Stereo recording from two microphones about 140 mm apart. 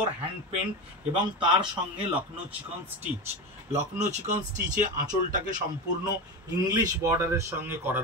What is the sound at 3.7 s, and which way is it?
Speech, 60° right (ahead or behind).